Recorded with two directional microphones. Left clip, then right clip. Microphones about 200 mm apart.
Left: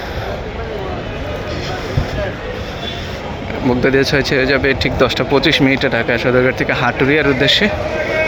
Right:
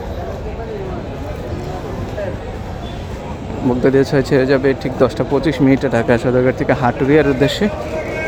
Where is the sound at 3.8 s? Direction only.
15° right (ahead or behind).